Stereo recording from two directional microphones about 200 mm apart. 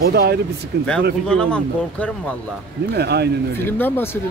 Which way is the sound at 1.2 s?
5° left (ahead or behind).